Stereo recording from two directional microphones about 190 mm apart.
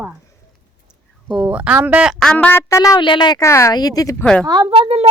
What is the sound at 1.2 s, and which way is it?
A woman's voice, 5° right (ahead or behind).